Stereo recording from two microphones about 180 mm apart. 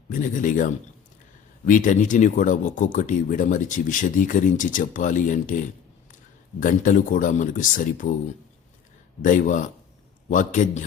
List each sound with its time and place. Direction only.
0.1 s speech: 45° left (ahead or behind)
6.6 s speech: 45° left (ahead or behind)
9.2 s speech: 45° left (ahead or behind)